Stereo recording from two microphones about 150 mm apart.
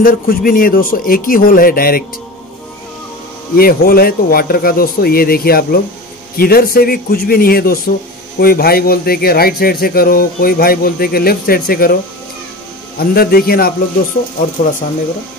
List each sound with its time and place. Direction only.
0.0 s speech: 70° left (ahead or behind)
3.5 s a man's voice: 90° left
13.0 s a man's voice: 90° left